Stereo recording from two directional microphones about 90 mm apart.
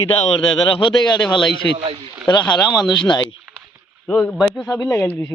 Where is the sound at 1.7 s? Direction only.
90° right.